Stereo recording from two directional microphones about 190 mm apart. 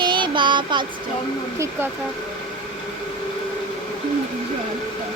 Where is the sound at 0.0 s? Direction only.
25° right (ahead or behind).